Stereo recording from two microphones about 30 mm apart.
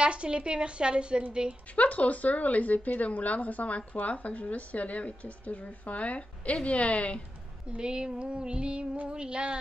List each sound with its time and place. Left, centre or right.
0.0 s a woman's voice: right
1.8 s a woman's voice: left
7.7 s female singing: right
8.2 s a woman's voice: right